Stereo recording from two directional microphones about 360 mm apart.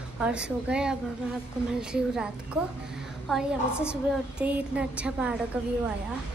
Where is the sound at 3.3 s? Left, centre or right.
Centre.